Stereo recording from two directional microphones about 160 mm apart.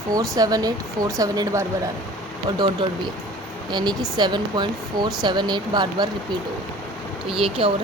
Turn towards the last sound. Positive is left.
turn(degrees=-35)  # may be behind; listen again after turning